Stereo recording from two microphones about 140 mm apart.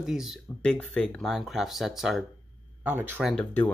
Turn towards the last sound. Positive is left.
turn(degrees=10)  # may be behind; listen again after turning